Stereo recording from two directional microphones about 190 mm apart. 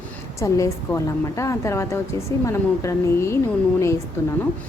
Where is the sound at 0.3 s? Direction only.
15° left (ahead or behind).